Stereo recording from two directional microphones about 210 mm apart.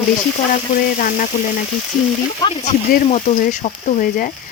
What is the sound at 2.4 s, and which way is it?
Speech, 15° left (ahead or behind).